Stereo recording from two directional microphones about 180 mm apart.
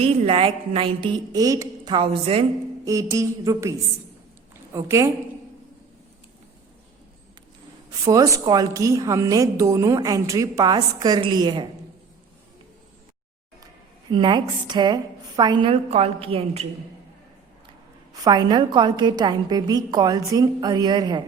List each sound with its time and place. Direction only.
0.0 s a woman's voice: 30° right (ahead or behind)
2.8 s a sound: 15° right (ahead or behind)
8.0 s a woman's voice: 20° right (ahead or behind)
14.1 s a woman's voice: 25° right (ahead or behind)
18.2 s a woman's voice: 20° right (ahead or behind)